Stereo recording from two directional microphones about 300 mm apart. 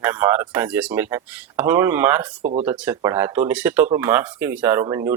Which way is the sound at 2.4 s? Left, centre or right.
Right.